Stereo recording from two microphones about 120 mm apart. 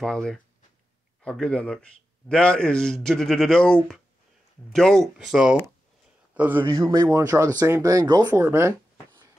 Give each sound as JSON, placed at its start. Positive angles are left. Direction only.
{"t": 0.0, "sound": "a man's voice", "side_deg": 5}
{"t": 6.7, "sound": "a man's voice", "side_deg": -30}
{"t": 8.3, "sound": "speech", "side_deg": -20}